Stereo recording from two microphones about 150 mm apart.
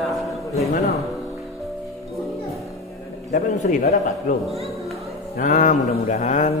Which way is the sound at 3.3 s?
55° left (ahead or behind).